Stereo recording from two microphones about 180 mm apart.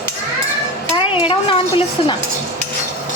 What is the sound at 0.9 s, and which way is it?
Speech, 30° left (ahead or behind).